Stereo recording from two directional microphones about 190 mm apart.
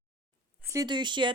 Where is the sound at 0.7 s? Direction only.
20° right (ahead or behind).